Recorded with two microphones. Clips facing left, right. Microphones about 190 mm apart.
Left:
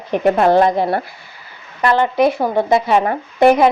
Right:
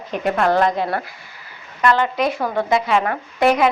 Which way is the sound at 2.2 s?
25° left (ahead or behind).